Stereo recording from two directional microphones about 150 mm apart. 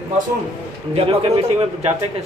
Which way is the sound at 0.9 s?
40° right (ahead or behind).